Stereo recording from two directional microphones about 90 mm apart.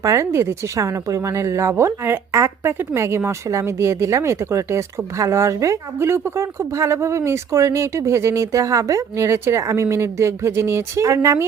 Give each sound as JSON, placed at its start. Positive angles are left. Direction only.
{"t": 0.0, "sound": "speech", "side_deg": -35}